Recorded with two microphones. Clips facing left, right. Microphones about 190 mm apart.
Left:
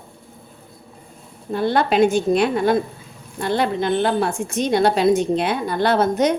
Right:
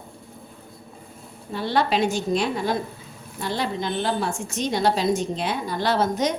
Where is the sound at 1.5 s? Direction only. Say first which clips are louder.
Left 5 dB; 50° left (ahead or behind).